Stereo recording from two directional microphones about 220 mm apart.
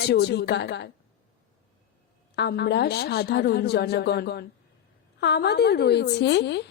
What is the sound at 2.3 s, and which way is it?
A woman's voice, 50° left (ahead or behind).